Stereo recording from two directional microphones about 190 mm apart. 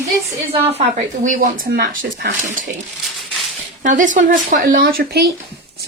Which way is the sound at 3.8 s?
40° right (ahead or behind).